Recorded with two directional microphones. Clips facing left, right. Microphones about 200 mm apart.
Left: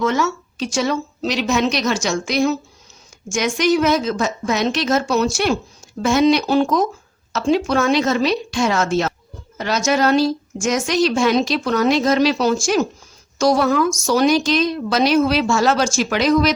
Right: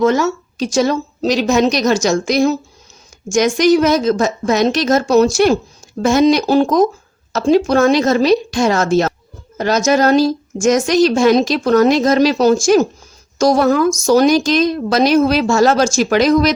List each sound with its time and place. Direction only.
0.0 s a woman's voice: 40° right (ahead or behind)